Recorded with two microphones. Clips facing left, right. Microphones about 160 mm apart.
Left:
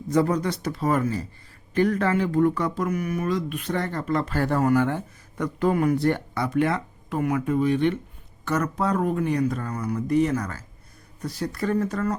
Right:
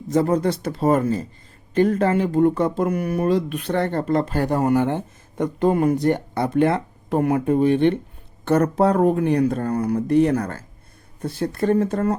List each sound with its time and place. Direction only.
0.1 s speech: 25° right (ahead or behind)
6.5 s speech: 30° right (ahead or behind)
7.7 s speech: 55° right (ahead or behind)
8.4 s speech: 30° right (ahead or behind)
9.0 s speech: 40° right (ahead or behind)
9.2 s speech: 65° right (ahead or behind)
11.2 s speech: 25° right (ahead or behind)